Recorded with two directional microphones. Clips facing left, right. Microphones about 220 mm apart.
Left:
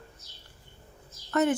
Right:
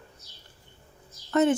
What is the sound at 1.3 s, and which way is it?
Speech, 25° right (ahead or behind).